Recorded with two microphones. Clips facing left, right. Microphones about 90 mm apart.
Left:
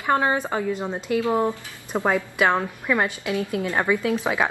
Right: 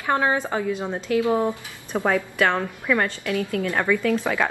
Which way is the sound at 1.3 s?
15° left (ahead or behind).